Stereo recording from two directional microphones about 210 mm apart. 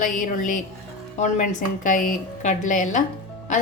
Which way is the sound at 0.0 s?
40° left (ahead or behind).